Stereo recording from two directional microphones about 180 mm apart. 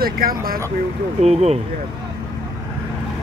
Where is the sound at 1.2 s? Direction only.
35° right (ahead or behind).